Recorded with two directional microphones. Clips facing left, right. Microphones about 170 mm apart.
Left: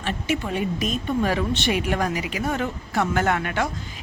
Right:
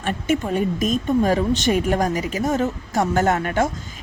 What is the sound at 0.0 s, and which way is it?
Speech, 45° right (ahead or behind).